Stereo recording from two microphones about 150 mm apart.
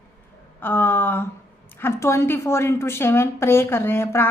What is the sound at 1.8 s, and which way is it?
A woman's voice, 20° left (ahead or behind).